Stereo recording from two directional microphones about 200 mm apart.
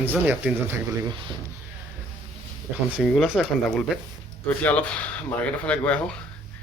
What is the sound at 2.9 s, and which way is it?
Speech, centre (ahead or behind).